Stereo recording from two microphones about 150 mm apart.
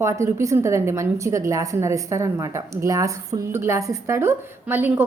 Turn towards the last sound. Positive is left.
turn(degrees=-15)  # may be behind; listen again after turning